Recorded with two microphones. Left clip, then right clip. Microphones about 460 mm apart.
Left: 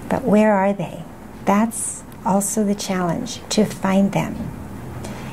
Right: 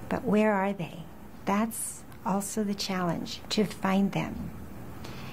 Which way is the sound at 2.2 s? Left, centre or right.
Left.